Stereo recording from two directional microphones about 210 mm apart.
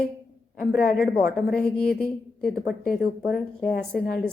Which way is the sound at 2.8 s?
45° left (ahead or behind).